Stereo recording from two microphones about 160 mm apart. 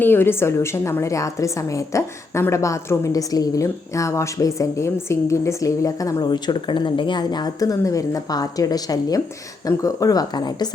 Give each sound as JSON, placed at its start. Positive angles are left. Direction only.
{"t": 0.0, "sound": "a woman's voice", "side_deg": 15}